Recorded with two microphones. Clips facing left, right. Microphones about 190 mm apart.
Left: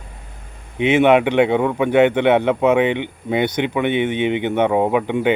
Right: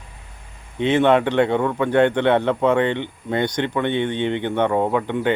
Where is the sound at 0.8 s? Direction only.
15° left (ahead or behind).